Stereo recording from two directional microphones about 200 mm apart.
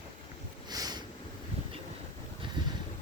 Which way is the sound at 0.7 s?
20° right (ahead or behind).